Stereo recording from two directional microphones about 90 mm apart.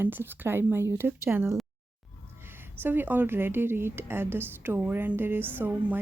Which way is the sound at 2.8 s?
20° right (ahead or behind).